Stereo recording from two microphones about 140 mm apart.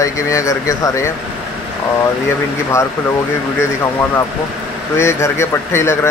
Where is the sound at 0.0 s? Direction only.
20° left (ahead or behind).